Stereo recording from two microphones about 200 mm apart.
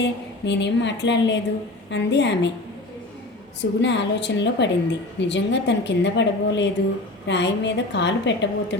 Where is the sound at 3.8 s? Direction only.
60° left (ahead or behind).